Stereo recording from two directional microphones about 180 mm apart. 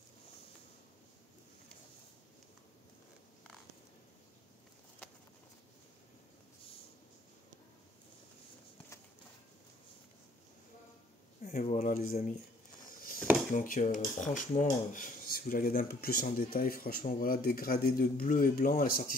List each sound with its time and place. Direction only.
11.4 s cutlery: 40° left (ahead or behind)
12.8 s a sound: 50° left (ahead or behind)
13.5 s cutlery: 45° left (ahead or behind)